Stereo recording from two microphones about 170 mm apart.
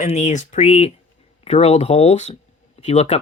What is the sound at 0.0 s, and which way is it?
Speech, 45° left (ahead or behind).